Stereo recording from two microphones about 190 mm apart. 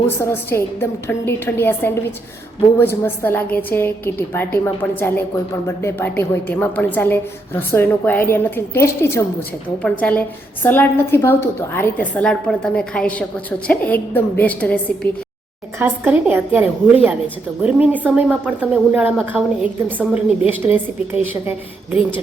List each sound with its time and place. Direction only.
0.2 s a woman's voice: 10° left (ahead or behind)
15.8 s speech: 10° right (ahead or behind)